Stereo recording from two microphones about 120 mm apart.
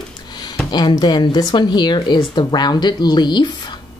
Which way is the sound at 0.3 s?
35° left (ahead or behind).